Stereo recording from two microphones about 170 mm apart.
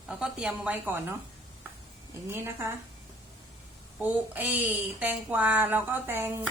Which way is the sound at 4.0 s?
10° right (ahead or behind).